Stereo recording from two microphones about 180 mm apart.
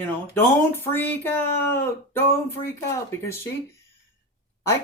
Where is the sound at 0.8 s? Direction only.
10° left (ahead or behind).